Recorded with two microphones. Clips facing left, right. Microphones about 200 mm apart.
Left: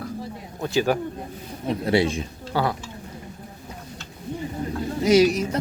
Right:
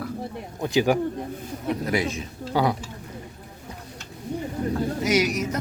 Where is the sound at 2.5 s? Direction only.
15° right (ahead or behind).